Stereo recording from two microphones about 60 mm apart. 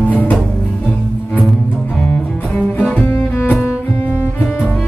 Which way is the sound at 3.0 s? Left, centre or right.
Left.